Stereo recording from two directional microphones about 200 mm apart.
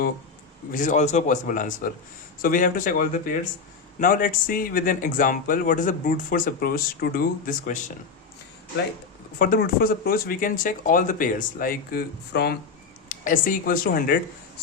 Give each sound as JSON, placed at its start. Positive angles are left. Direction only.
{"t": 0.7, "sound": "a man's voice", "side_deg": 40}
{"t": 9.4, "sound": "speech", "side_deg": 45}